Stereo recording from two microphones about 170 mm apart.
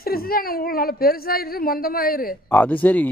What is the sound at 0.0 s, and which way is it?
A woman's voice, 60° left (ahead or behind).